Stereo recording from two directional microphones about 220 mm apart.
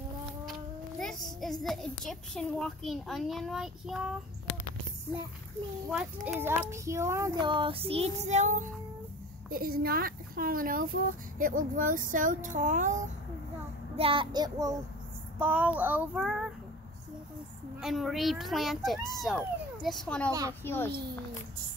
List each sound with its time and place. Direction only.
0.5 s a child's voice: centre (ahead or behind)
5.9 s speech: 5° right (ahead or behind); by 13.1 s 35° right (ahead or behind)
13.9 s child singing: 25° right (ahead or behind)
15.3 s speech: 10° right (ahead or behind)
17.7 s speech: centre (ahead or behind)
20.2 s speech: 15° right (ahead or behind)
20.6 s a child's voice: 10° left (ahead or behind)